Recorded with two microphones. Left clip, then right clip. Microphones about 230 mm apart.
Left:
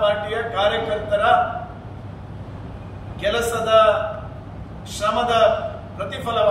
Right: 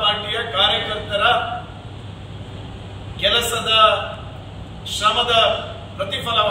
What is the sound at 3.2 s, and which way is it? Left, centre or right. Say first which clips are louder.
Speech: right 3 dB; centre.